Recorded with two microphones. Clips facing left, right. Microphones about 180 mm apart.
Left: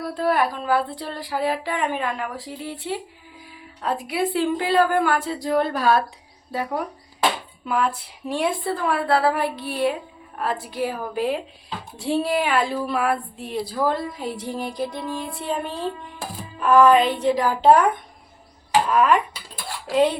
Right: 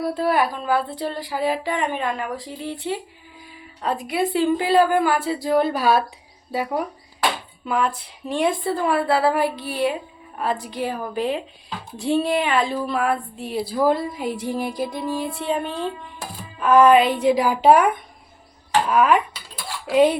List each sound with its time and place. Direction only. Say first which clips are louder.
0.1 s speech: left 2 dB; 5° right (ahead or behind)
7.6 s speech: right 1 dB; 5° left (ahead or behind)